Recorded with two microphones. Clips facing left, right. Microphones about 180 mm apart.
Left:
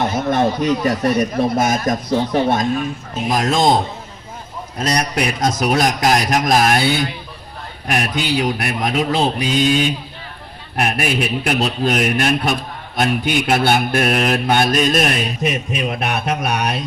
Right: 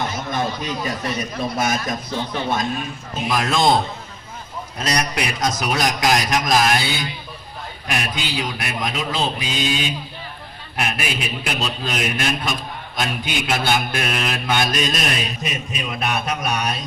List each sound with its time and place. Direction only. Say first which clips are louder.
0.0 s a sound: left 7 dB; 60° left (ahead or behind)
0.9 s a man's voice: left 9 dB; 55° left (ahead or behind); by 3.7 s 40° left (ahead or behind)
4.8 s a man's voice: left 4 dB; 50° left (ahead or behind)
8.6 s a man's voice: left 6 dB; 45° left (ahead or behind); by 16.8 s 60° left (ahead or behind)